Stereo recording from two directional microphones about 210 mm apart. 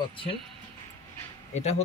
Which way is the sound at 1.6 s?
30° left (ahead or behind).